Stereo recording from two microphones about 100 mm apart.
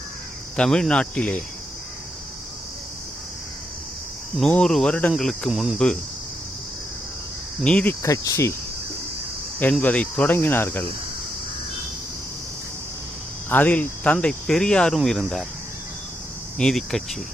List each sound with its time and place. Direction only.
0.5 s speech: 10° left (ahead or behind)
4.4 s speech: 10° left (ahead or behind)
7.6 s speech: 10° left (ahead or behind)
8.0 s cricket: 35° left (ahead or behind)
9.8 s speech: 15° left (ahead or behind)
13.5 s speech: 15° left (ahead or behind)
16.6 s speech: 5° left (ahead or behind)